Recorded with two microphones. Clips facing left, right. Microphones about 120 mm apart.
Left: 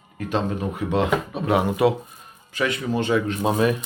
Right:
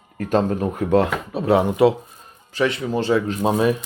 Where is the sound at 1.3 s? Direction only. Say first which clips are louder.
Right 3 dB; 30° right (ahead or behind).